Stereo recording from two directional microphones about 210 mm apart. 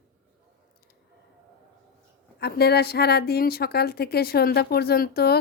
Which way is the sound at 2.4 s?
50° left (ahead or behind).